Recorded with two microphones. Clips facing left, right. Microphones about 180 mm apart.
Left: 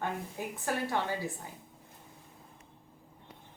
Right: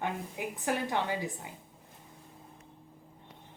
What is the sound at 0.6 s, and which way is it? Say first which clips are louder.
Speech: right 1 dB; 15° right (ahead or behind).